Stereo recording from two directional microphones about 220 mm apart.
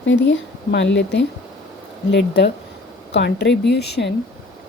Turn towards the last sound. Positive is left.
turn(degrees=50)  # may be behind; listen again after turning